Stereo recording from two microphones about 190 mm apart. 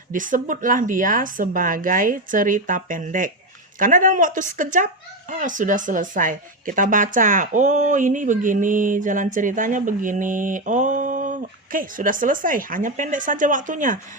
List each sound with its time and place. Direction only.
0.1 s speech: 45° right (ahead or behind)